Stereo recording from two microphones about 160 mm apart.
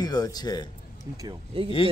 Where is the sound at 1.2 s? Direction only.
35° right (ahead or behind).